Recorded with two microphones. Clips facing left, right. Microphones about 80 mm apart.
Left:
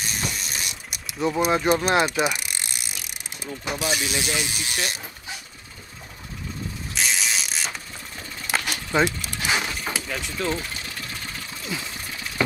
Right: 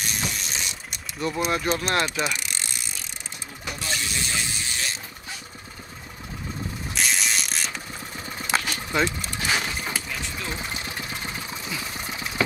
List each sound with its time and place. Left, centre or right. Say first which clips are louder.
0.2 s mechanisms: even; centre
1.2 s speech: left 4 dB; centre
4.1 s speech: left 3 dB; left
7.0 s mechanisms: even; centre
8.6 s a sound: left 2 dB; centre
10.0 s speech: left 5 dB; left
10.5 s engine: left 2 dB; centre